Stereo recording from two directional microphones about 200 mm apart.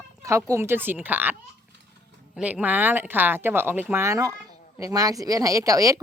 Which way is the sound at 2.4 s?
5° right (ahead or behind).